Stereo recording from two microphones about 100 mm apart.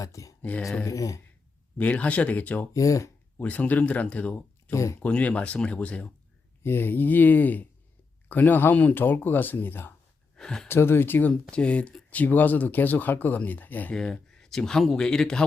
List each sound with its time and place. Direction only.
0.0 s speech: 35° left (ahead or behind)
1.8 s speech: 15° left (ahead or behind)
2.7 s speech: 35° left (ahead or behind)
3.3 s speech: 15° left (ahead or behind)
4.7 s speech: 30° left (ahead or behind)
5.0 s speech: 15° left (ahead or behind)
10.3 s speech: 5° left (ahead or behind)
10.7 s speech: 25° left (ahead or behind)
13.9 s speech: 5° left (ahead or behind)